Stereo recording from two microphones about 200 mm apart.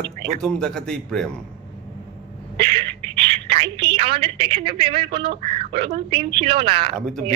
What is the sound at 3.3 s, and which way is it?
A woman's voice, 30° right (ahead or behind).